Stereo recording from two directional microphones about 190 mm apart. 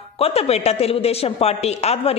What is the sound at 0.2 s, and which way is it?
A woman's voice, 35° left (ahead or behind).